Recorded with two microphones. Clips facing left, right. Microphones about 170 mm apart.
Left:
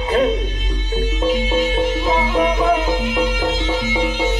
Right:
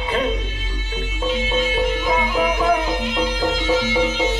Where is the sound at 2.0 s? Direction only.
25° left (ahead or behind).